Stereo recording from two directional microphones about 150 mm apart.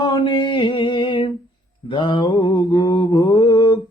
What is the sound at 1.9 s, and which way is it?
Mantra, 35° left (ahead or behind).